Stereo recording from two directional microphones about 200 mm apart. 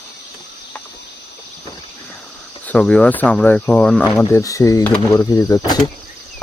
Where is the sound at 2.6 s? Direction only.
5° left (ahead or behind).